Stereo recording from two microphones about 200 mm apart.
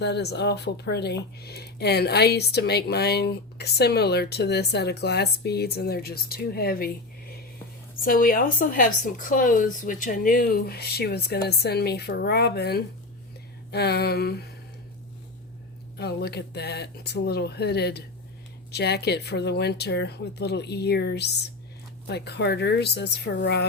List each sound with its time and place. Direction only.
0.0 s speech: 55° left (ahead or behind)
16.0 s speech: 55° left (ahead or behind)